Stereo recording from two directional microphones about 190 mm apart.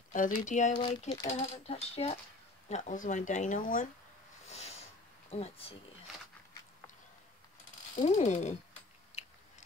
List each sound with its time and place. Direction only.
0.1 s speech: 40° left (ahead or behind)
0.7 s speech: 25° left (ahead or behind); by 3.8 s 45° left (ahead or behind)
4.5 s snort: 35° left (ahead or behind)
5.3 s speech: 35° left (ahead or behind)
7.9 s speech: 35° left (ahead or behind)